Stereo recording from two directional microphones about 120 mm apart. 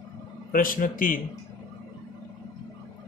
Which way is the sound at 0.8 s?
90° left.